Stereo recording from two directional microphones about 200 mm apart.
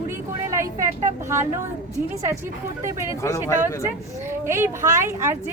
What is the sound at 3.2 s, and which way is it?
Speech, 15° left (ahead or behind).